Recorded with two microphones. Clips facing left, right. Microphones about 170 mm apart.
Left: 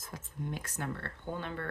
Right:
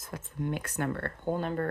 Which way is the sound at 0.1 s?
65° right (ahead or behind).